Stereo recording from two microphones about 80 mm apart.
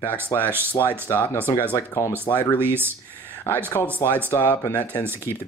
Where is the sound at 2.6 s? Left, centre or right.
Right.